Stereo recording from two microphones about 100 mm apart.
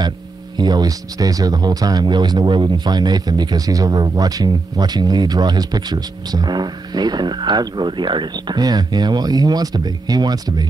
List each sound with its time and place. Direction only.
0.6 s speech: 45° right (ahead or behind)